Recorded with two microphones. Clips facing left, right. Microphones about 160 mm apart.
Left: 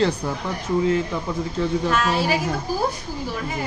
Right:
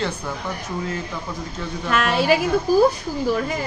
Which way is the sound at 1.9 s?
75° right (ahead or behind).